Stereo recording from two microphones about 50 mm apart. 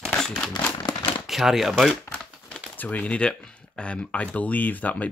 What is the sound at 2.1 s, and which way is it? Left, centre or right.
Crumpling, left.